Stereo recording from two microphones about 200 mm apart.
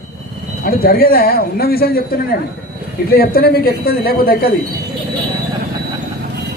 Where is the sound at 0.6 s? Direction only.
45° left (ahead or behind).